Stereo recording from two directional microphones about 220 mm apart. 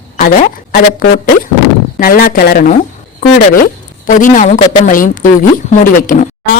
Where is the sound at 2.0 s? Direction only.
40° left (ahead or behind).